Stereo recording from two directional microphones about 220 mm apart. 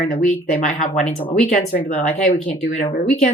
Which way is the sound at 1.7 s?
40° left (ahead or behind).